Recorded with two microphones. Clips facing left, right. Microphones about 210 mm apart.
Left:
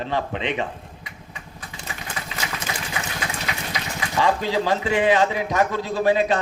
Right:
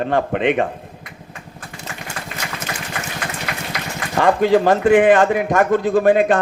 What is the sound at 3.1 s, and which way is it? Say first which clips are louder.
Speech: right 2 dB; 55° right (ahead or behind).